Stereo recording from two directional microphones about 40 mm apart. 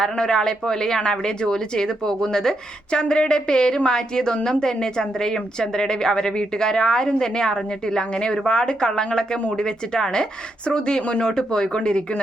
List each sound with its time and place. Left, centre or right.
0.0 s speech: centre
3.0 s a woman's voice: left